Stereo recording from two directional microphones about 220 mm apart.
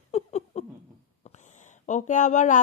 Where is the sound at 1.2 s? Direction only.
35° left (ahead or behind).